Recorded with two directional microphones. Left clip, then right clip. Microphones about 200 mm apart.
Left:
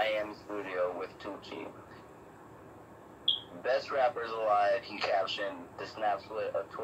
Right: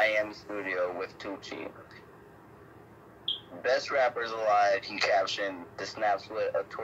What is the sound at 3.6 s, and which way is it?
Speech, 35° right (ahead or behind).